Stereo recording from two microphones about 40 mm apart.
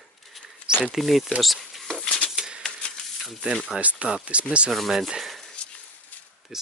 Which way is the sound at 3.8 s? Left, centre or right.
Right.